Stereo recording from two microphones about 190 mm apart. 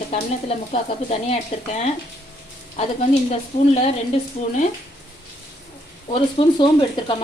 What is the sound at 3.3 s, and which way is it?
Speech, 35° left (ahead or behind).